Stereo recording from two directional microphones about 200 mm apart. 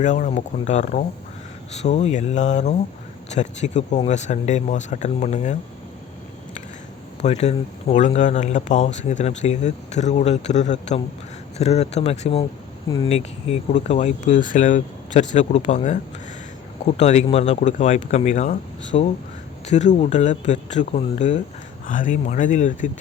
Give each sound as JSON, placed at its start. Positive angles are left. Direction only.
{"t": 0.0, "sound": "speech", "side_deg": 35}
{"t": 7.2, "sound": "speech", "side_deg": 35}